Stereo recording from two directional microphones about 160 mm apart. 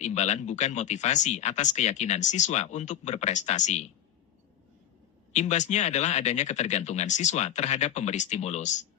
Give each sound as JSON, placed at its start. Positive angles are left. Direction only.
{"t": 0.0, "sound": "speech", "side_deg": 45}
{"t": 5.3, "sound": "speech", "side_deg": 45}